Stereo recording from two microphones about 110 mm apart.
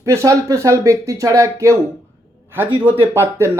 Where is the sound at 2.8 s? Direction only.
20° right (ahead or behind).